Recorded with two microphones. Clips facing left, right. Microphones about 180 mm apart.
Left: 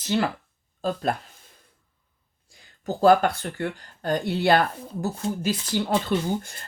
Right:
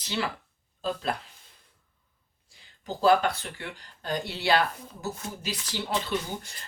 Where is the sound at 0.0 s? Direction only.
50° left (ahead or behind).